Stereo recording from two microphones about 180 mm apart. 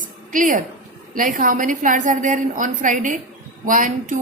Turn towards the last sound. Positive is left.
turn(degrees=-45)  # may be behind; listen again after turning